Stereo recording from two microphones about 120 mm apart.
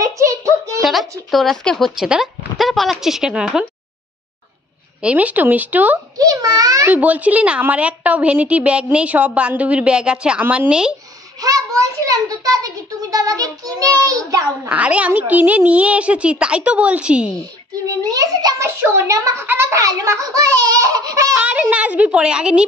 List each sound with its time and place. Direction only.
0.0 s child singing: 25° right (ahead or behind)
1.3 s speech: centre (ahead or behind)
5.0 s a woman's voice: 10° right (ahead or behind)
6.1 s a child's voice: 30° right (ahead or behind)
6.9 s a woman's voice: 15° right (ahead or behind)
11.4 s a child's voice: 30° right (ahead or behind)
14.7 s a woman's voice: 10° right (ahead or behind)
17.8 s a child's voice: 30° right (ahead or behind)
21.4 s a woman's voice: 10° right (ahead or behind)